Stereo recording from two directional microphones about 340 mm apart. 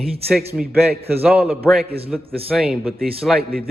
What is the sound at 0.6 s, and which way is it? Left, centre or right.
Speech, right.